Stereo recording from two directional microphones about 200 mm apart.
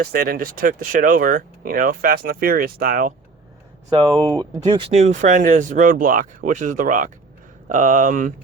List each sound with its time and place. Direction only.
0.0 s speech: 50° right (ahead or behind)
4.4 s speech: 20° right (ahead or behind)
4.9 s speech: 35° right (ahead or behind)